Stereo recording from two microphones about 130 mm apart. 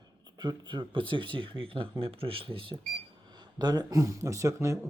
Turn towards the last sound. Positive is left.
turn(degrees=-20)  # may be behind; listen again after turning